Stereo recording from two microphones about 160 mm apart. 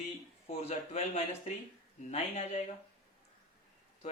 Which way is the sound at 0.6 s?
40° left (ahead or behind).